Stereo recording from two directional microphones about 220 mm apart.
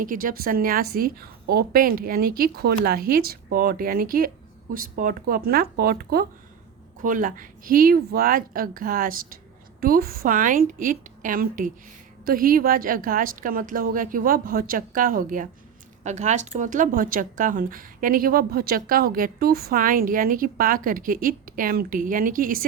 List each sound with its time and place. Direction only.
0.0 s a woman's voice: 40° right (ahead or behind)